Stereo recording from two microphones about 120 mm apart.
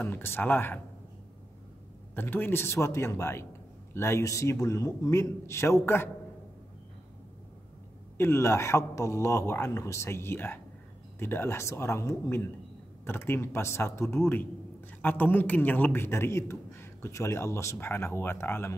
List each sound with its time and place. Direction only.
0.0 s speech: 20° left (ahead or behind)
2.1 s a man's voice: 15° left (ahead or behind)
8.2 s a man's voice: 20° left (ahead or behind)